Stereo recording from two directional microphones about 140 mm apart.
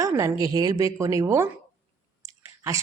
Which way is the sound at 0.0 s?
20° right (ahead or behind).